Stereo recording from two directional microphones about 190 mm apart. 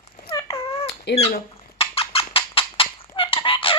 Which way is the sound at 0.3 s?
20° left (ahead or behind).